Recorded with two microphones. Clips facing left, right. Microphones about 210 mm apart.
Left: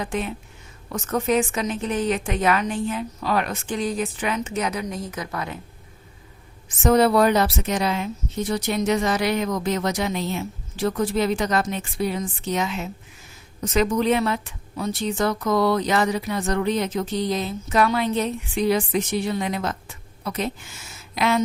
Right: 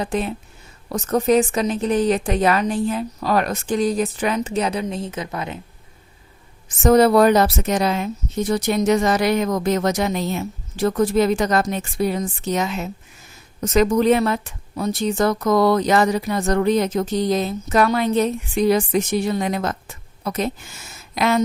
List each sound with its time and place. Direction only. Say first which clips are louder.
0.0 s a woman's voice: right 4 dB; 35° right (ahead or behind)
6.7 s a woman's voice: right 4 dB; 40° right (ahead or behind)